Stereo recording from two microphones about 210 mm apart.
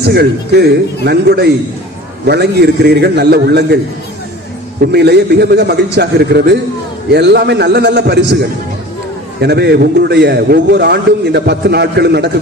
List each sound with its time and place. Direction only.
0.0 s a man's voice: 50° right (ahead or behind)
4.8 s a man's voice: 50° right (ahead or behind)